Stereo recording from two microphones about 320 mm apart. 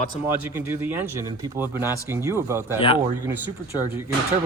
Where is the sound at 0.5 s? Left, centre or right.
Centre.